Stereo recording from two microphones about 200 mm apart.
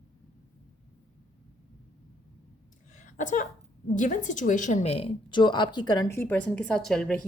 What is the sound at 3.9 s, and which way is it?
A woman's voice, 40° left (ahead or behind).